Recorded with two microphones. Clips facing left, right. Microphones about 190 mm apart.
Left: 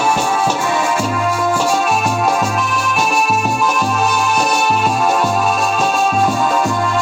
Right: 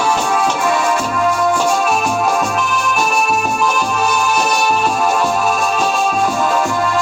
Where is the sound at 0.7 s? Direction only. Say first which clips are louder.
Even; centre (ahead or behind).